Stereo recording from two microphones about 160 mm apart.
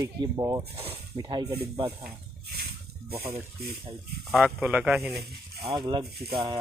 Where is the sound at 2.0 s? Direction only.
70° right (ahead or behind).